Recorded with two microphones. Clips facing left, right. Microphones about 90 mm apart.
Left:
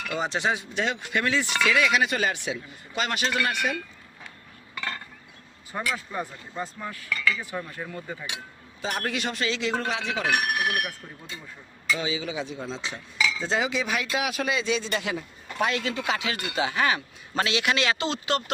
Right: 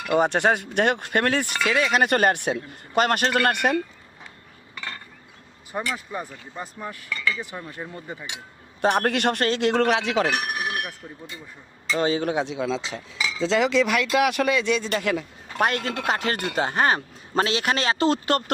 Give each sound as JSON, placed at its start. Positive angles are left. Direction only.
{"t": 0.1, "sound": "speech", "side_deg": -50}
{"t": 1.6, "sound": "speech", "side_deg": -35}
{"t": 2.0, "sound": "speech", "side_deg": -55}
{"t": 5.9, "sound": "speech", "side_deg": -10}
{"t": 7.7, "sound": "speech", "side_deg": -25}
{"t": 8.8, "sound": "speech", "side_deg": -60}
{"t": 10.3, "sound": "speech", "side_deg": 0}
{"t": 10.7, "sound": "speech", "side_deg": -30}
{"t": 11.9, "sound": "speech", "side_deg": -50}
{"t": 13.1, "sound": "cutlery", "side_deg": -30}
{"t": 13.4, "sound": "speech", "side_deg": -80}